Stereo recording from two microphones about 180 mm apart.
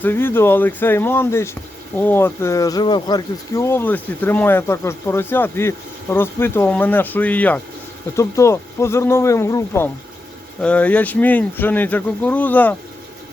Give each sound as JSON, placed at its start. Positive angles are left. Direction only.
{"t": 0.0, "sound": "speech", "side_deg": 10}